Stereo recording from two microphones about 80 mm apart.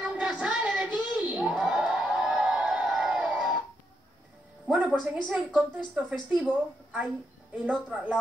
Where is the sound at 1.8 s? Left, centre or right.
Centre.